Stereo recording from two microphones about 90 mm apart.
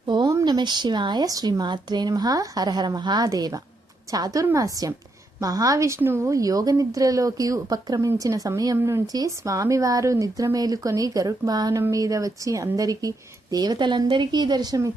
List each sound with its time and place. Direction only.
0.0 s a sound: 55° right (ahead or behind)
0.4 s speech: 55° right (ahead or behind); by 6.0 s 40° right (ahead or behind)
6.0 s speech: 25° right (ahead or behind)
8.8 s speech: 30° right (ahead or behind)
9.1 s speech: 40° right (ahead or behind)